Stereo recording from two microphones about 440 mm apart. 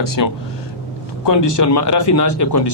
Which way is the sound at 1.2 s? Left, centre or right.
Left.